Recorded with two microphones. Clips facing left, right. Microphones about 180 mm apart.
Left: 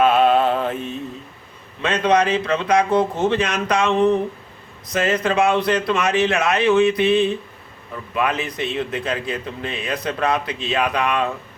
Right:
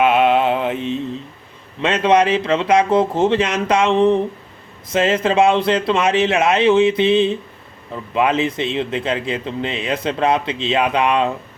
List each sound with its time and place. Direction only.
0.0 s music: 20° right (ahead or behind)
1.8 s speech: 25° right (ahead or behind)